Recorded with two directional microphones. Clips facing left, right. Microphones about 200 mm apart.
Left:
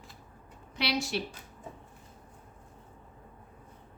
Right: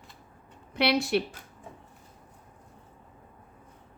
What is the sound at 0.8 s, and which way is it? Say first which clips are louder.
Speech: right 7 dB; 60° right (ahead or behind).